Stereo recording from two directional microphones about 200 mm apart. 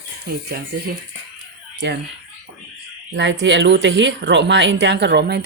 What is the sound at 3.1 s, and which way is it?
Speech, 65° right (ahead or behind).